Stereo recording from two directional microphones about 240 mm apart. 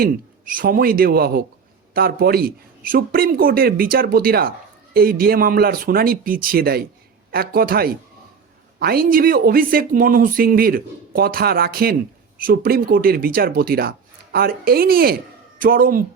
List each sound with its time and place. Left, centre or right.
0.0 s speech: right